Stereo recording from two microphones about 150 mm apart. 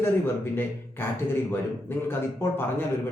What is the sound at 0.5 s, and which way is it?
A man's voice, 15° left (ahead or behind).